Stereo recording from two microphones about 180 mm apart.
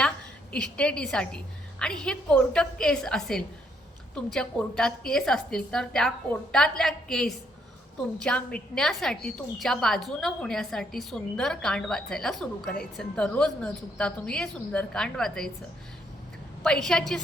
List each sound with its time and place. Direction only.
0.5 s a woman's voice: 5° left (ahead or behind)
16.6 s a woman's voice: 5° left (ahead or behind)